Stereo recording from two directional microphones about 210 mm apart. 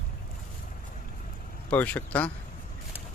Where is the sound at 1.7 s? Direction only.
5° left (ahead or behind).